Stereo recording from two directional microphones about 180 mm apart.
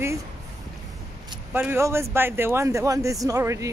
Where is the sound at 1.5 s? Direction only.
10° right (ahead or behind).